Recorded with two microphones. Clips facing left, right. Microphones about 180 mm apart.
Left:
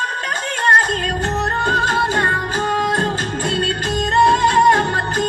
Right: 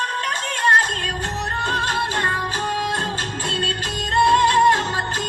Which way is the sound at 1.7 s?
45° left (ahead or behind).